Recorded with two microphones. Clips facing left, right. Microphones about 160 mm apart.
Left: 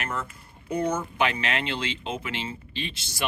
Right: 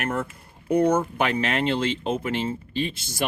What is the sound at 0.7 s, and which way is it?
Speech, 55° right (ahead or behind).